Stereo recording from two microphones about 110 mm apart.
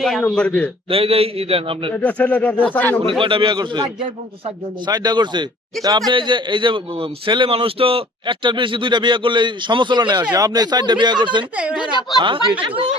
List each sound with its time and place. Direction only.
0.0 s speech: 5° left (ahead or behind)
0.9 s a man's voice: 60° right (ahead or behind)
1.9 s speech: 15° left (ahead or behind)
3.1 s a man's voice: 50° right (ahead or behind)
4.9 s a man's voice: 40° right (ahead or behind)
12.6 s a man's voice: 50° right (ahead or behind)